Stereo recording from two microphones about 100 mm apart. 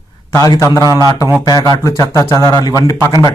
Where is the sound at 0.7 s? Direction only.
40° left (ahead or behind).